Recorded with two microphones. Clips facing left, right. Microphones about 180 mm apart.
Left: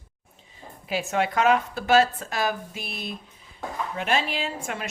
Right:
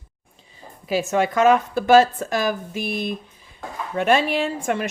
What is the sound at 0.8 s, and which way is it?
Speech, 40° right (ahead or behind).